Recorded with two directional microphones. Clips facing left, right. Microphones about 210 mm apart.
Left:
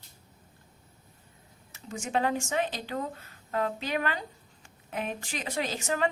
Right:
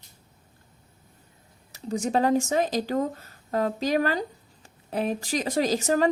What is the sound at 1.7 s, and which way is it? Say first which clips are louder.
A woman's voice: right 6 dB; 35° right (ahead or behind).